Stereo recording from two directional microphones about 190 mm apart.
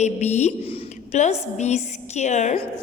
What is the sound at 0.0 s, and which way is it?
Speech, 35° left (ahead or behind).